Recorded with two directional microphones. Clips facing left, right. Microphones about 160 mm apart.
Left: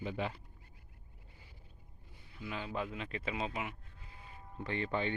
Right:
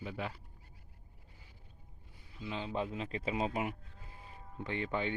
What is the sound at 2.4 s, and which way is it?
Speech, 25° right (ahead or behind).